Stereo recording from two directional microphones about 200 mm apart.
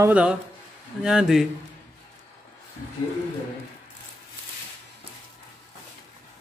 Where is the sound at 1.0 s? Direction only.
5° right (ahead or behind).